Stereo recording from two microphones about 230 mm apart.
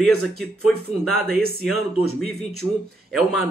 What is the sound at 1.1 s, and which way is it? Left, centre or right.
Speech, left.